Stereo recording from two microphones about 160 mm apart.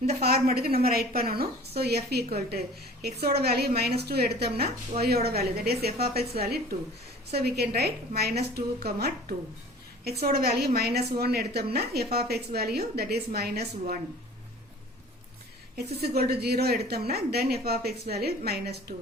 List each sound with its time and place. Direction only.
0.5 s a woman's voice: 70° right (ahead or behind)
16.0 s a woman's voice: 80° right